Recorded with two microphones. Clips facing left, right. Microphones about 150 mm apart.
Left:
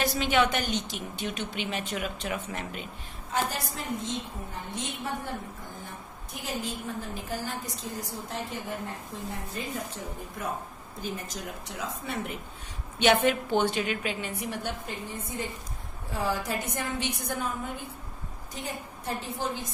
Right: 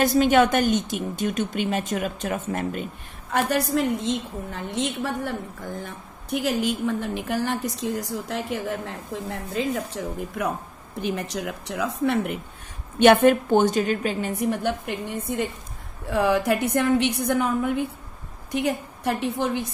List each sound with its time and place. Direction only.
0.0 s a woman's voice: 45° right (ahead or behind)
3.3 s a woman's voice: 65° right (ahead or behind); by 5.3 s 80° right
6.3 s a woman's voice: 80° right
11.0 s a woman's voice: 75° right (ahead or behind)
13.0 s a woman's voice: 50° right (ahead or behind)